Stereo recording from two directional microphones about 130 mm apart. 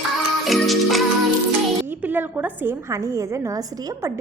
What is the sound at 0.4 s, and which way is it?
Music, centre (ahead or behind).